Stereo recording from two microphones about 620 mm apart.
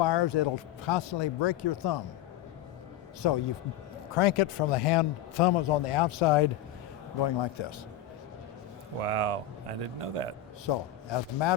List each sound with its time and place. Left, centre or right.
0.0 s speech: left
3.2 s speech: left
4.1 s a man's voice: left
9.0 s speech: right
10.7 s a man's voice: left